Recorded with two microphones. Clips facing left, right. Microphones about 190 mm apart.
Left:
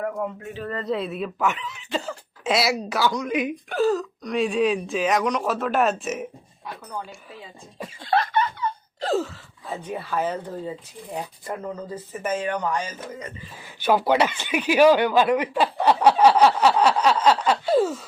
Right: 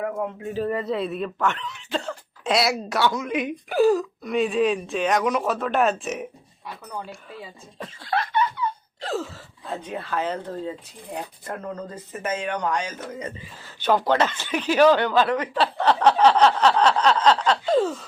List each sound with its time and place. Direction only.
0.4 s speech: 35° right (ahead or behind)
0.9 s speech: centre (ahead or behind)
3.8 s speech: 10° right (ahead or behind)
7.8 s speech: 10° left (ahead or behind)
8.3 s a sound: 40° left (ahead or behind)
9.6 s speech: 10° left (ahead or behind)